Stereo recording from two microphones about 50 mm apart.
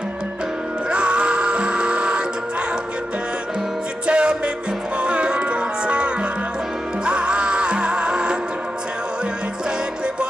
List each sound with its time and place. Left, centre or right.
0.9 s music: right
4.1 s music: centre